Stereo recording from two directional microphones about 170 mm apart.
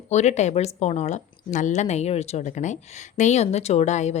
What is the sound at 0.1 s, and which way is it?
A woman's voice, 40° left (ahead or behind).